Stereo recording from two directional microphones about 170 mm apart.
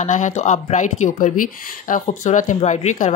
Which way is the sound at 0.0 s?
45° left (ahead or behind).